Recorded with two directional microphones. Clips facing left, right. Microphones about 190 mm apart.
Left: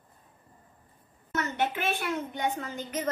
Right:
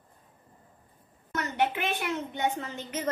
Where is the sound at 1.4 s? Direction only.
15° right (ahead or behind).